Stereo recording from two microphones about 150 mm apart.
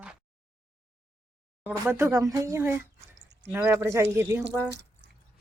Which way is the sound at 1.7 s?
20° right (ahead or behind).